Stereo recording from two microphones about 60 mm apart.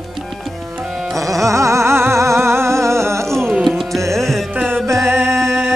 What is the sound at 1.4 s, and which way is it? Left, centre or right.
Music, right.